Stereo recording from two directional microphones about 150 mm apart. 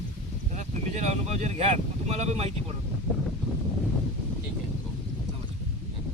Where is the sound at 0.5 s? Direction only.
50° right (ahead or behind).